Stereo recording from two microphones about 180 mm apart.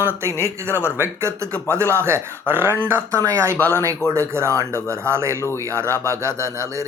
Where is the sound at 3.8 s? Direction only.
15° right (ahead or behind).